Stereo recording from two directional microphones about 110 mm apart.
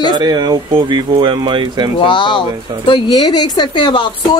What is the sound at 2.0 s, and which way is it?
Speech, 50° left (ahead or behind).